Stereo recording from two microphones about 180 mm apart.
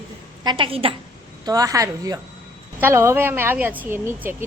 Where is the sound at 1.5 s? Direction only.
20° right (ahead or behind).